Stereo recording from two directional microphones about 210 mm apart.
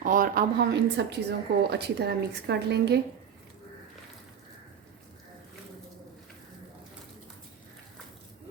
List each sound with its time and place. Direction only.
0.0 s speech: 40° right (ahead or behind)